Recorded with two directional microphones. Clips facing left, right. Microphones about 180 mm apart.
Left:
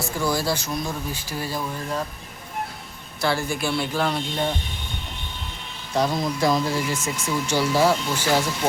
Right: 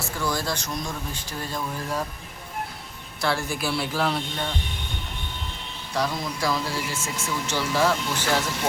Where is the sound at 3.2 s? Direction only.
Centre (ahead or behind).